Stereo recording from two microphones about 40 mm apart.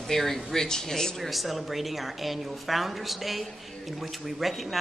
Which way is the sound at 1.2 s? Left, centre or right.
Centre.